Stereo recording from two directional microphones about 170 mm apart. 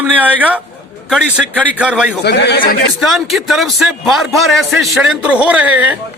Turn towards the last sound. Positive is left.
turn(degrees=-10)  # may be behind; listen again after turning